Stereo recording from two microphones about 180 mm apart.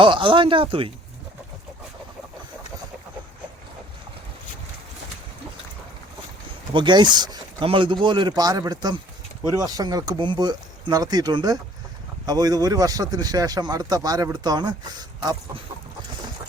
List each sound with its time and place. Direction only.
0.0 s speech: 30° right (ahead or behind)
6.7 s speech: 25° right (ahead or behind)